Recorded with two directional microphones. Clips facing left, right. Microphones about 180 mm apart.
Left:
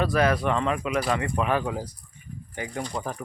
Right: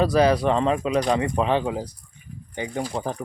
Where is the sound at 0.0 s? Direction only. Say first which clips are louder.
Right 4 dB; 35° right (ahead or behind).